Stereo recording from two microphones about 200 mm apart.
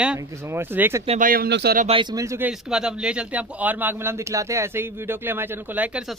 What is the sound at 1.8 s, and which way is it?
Speech, 25° right (ahead or behind).